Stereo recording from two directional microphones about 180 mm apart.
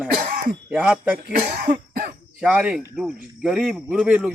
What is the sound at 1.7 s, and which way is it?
Cough, 50° right (ahead or behind).